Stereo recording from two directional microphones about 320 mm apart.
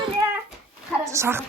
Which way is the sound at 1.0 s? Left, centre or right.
Centre.